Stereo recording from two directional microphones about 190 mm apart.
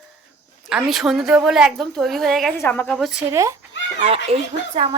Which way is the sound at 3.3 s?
15° right (ahead or behind).